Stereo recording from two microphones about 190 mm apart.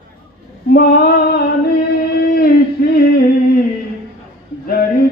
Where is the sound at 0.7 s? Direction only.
55° left (ahead or behind).